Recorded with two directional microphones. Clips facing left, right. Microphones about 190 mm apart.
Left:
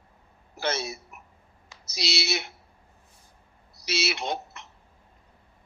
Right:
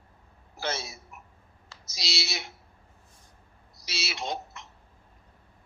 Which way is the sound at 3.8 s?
65° left (ahead or behind).